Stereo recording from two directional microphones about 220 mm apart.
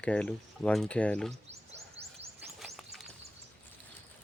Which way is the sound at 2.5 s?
Centre (ahead or behind).